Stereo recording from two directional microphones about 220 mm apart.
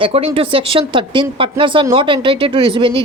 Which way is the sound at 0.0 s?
25° right (ahead or behind).